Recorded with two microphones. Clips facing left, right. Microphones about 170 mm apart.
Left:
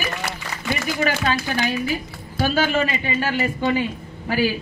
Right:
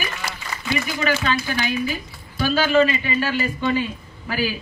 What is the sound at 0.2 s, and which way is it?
A woman's voice, 50° left (ahead or behind).